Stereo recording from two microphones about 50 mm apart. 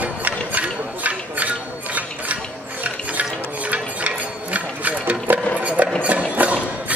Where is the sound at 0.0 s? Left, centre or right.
Right.